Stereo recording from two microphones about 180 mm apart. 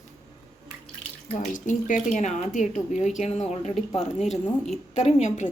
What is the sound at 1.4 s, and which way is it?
A woman's voice, 45° left (ahead or behind).